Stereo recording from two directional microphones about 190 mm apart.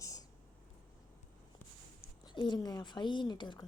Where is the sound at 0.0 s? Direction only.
20° left (ahead or behind).